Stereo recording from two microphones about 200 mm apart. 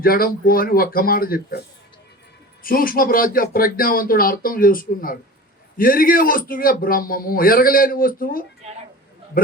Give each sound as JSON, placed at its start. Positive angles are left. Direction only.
{"t": 0.0, "sound": "a man's voice", "side_deg": 45}
{"t": 2.6, "sound": "a man's voice", "side_deg": 45}